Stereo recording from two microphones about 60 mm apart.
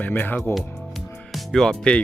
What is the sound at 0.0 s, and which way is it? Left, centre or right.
Speech, left.